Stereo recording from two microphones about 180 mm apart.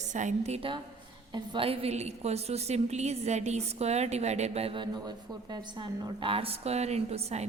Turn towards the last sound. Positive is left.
turn(degrees=-35)  # may be behind; listen again after turning